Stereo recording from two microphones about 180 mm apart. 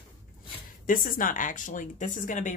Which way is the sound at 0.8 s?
50° left (ahead or behind).